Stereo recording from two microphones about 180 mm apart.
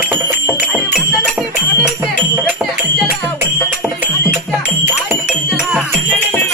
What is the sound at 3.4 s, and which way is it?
Music, 15° right (ahead or behind).